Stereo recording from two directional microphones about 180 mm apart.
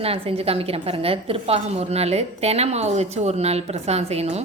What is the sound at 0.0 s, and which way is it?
Speech, 35° right (ahead or behind).